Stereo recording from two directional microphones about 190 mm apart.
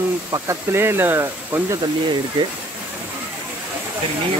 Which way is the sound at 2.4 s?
30° right (ahead or behind).